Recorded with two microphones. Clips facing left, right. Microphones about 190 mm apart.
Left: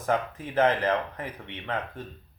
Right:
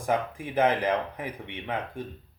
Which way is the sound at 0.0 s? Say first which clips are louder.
Even; 10° right (ahead or behind).